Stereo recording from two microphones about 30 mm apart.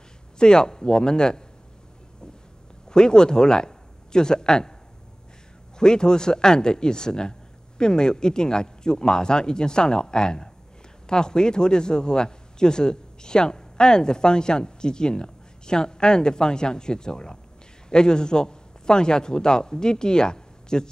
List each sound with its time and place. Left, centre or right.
0.4 s speech: left
2.9 s speech: left
5.8 s a man's voice: left